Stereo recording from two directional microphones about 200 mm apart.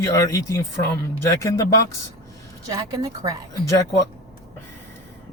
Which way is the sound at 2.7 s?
20° right (ahead or behind).